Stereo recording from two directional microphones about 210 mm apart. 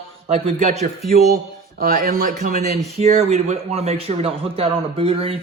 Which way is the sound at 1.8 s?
45° right (ahead or behind).